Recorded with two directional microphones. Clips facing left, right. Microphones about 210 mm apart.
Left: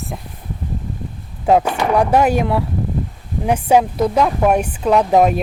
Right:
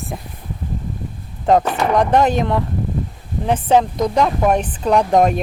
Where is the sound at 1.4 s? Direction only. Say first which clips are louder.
Even; 5° left (ahead or behind).